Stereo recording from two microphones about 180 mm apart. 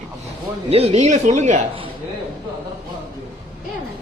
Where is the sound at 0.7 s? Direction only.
35° right (ahead or behind).